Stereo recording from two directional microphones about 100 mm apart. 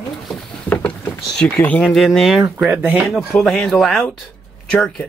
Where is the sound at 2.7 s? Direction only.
20° right (ahead or behind).